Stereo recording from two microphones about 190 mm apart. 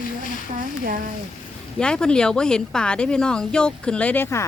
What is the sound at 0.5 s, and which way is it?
Speech, 45° right (ahead or behind).